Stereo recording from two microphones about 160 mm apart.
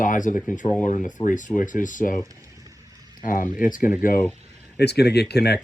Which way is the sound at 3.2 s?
60° left (ahead or behind).